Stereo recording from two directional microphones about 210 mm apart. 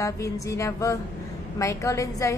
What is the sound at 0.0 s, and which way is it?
A woman's voice, 15° left (ahead or behind).